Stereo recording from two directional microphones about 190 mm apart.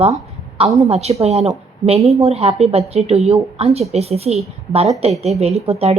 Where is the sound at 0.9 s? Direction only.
35° right (ahead or behind).